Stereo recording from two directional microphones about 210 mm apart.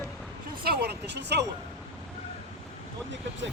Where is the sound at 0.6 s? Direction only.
50° right (ahead or behind).